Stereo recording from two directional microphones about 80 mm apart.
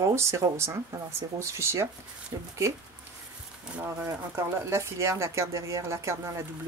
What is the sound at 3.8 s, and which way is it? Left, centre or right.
Speech, right.